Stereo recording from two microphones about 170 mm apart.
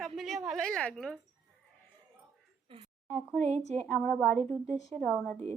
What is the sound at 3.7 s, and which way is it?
A woman's voice, 10° left (ahead or behind).